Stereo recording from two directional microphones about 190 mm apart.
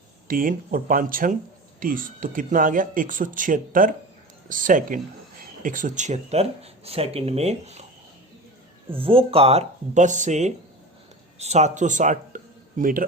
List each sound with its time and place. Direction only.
0.3 s speech: 45° right (ahead or behind)
8.9 s speech: 30° right (ahead or behind); by 13.1 s 45° right (ahead or behind)